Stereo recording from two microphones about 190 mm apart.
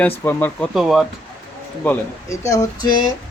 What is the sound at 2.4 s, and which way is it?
Speech, 15° left (ahead or behind).